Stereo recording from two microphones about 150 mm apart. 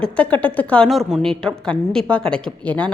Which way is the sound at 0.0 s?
10° left (ahead or behind).